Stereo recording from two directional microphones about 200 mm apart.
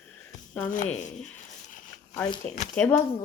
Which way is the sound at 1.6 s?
40° left (ahead or behind).